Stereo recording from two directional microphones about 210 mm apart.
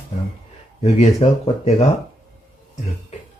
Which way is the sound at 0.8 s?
30° left (ahead or behind).